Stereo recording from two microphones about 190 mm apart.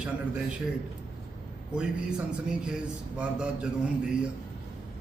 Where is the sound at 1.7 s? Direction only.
5° right (ahead or behind).